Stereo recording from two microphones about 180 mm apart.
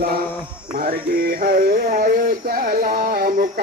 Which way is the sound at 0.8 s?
55° right (ahead or behind).